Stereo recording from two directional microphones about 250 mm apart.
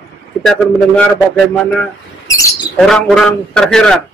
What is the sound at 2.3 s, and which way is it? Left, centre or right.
Speech, centre.